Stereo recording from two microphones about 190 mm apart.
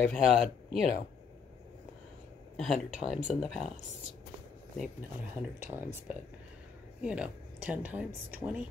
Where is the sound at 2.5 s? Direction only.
Centre (ahead or behind).